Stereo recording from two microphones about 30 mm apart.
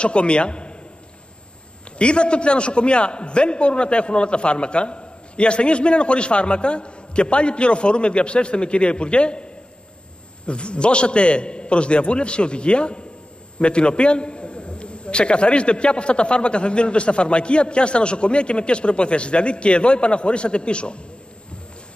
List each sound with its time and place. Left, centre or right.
0.0 s a man's voice: left
2.0 s a man's voice: left